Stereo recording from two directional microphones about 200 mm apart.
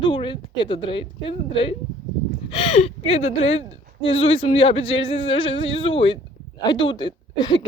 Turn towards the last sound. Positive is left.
turn(degrees=20)  # may be behind; listen again after turning